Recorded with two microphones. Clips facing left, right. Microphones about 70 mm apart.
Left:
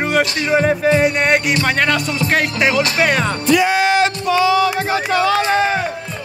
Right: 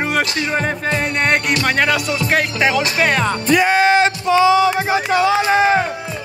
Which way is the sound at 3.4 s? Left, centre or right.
Right.